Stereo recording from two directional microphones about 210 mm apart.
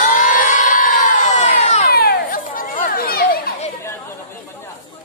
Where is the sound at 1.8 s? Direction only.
45° left (ahead or behind).